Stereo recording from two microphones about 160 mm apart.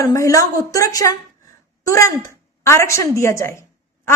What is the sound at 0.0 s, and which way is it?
A woman's voice, 20° left (ahead or behind).